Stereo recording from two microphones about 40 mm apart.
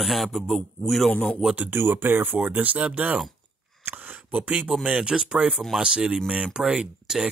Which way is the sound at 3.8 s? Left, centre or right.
Right.